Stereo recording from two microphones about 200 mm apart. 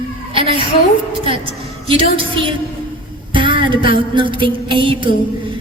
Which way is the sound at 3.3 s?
25° right (ahead or behind).